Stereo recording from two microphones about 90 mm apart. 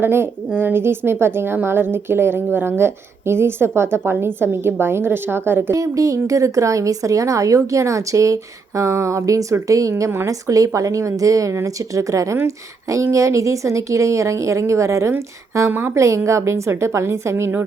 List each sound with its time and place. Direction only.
0.0 s a woman's voice: 25° right (ahead or behind)
5.7 s a woman's voice: 35° right (ahead or behind)